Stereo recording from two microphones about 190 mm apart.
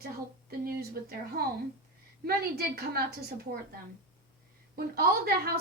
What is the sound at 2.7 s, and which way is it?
Speech, 55° right (ahead or behind).